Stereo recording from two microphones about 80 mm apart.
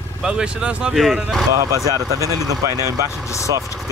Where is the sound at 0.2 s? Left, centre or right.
Centre.